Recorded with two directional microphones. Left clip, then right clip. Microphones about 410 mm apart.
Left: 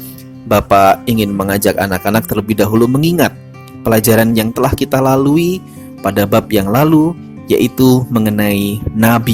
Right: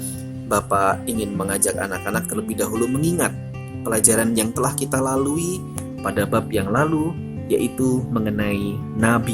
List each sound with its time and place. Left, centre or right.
0.4 s speech: centre